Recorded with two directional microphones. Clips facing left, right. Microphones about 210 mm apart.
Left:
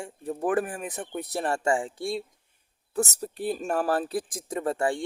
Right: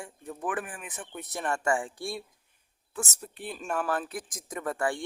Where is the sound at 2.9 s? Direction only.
40° left (ahead or behind).